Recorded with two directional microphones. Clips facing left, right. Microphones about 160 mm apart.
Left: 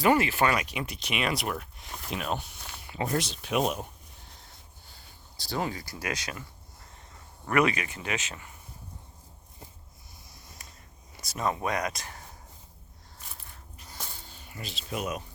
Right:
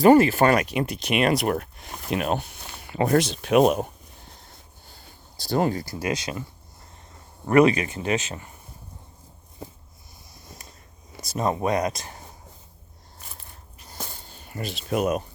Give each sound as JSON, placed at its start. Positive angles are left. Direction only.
{"t": 0.0, "sound": "speech", "side_deg": -40}
{"t": 5.4, "sound": "speech", "side_deg": -45}
{"t": 7.4, "sound": "speech", "side_deg": -30}
{"t": 11.2, "sound": "speech", "side_deg": -35}
{"t": 13.9, "sound": "a sound", "side_deg": -45}